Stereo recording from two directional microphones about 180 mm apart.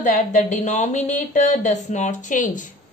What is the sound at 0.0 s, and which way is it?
A woman's voice, 45° left (ahead or behind).